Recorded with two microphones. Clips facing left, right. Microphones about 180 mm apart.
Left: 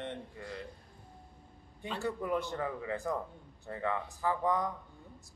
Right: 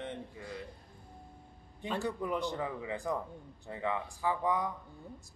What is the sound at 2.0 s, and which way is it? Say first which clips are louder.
Speech: left 2 dB; 15° right (ahead or behind).